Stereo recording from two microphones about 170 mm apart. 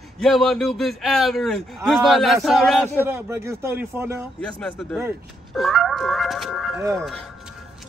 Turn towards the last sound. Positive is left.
turn(degrees=0)  # may be behind; listen again after turning